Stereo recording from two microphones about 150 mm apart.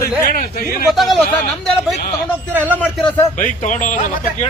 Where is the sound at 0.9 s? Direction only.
Centre (ahead or behind).